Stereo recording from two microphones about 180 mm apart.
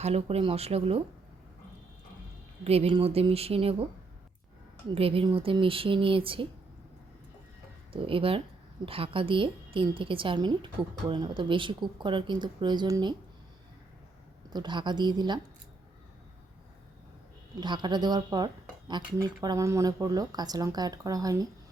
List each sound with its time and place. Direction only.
0.0 s a woman's voice: 35° right (ahead or behind)
2.6 s a woman's voice: 30° right (ahead or behind)
4.9 s speech: 30° right (ahead or behind)
7.9 s a woman's voice: 30° right (ahead or behind)
14.5 s speech: 25° right (ahead or behind)
17.6 s speech: 25° right (ahead or behind)